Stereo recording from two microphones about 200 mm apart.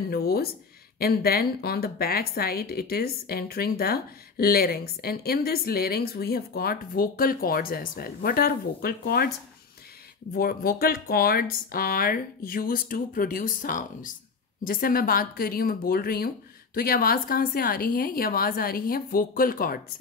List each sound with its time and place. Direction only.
0.1 s speech: 50° left (ahead or behind)
10.3 s speech: 50° left (ahead or behind)